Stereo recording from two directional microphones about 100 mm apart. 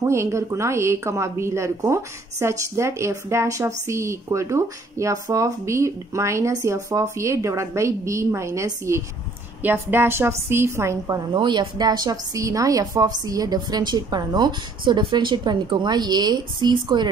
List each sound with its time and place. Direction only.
0.0 s a woman's voice: 30° right (ahead or behind)
9.6 s a woman's voice: 20° right (ahead or behind)
11.3 s a woman's voice: 50° right (ahead or behind)